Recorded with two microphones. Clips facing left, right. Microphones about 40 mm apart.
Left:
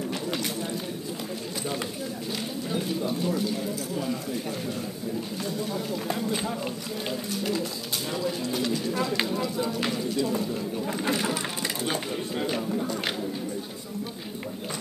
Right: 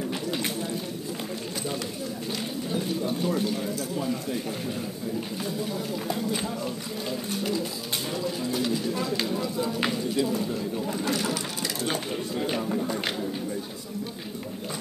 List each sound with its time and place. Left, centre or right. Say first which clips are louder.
3.1 s speech: right 2 dB; centre
8.1 s speech: left 1 dB; centre
10.3 s speech: even; left